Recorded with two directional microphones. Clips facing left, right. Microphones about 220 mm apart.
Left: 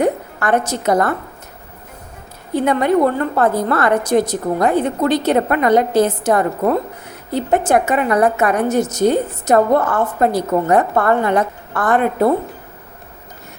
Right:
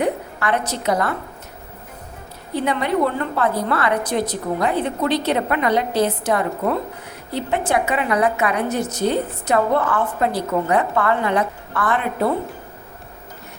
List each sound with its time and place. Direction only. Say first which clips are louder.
0.0 s a woman's voice: left 4 dB; 45° left (ahead or behind)
2.6 s a woman's voice: left 5 dB; 45° left (ahead or behind)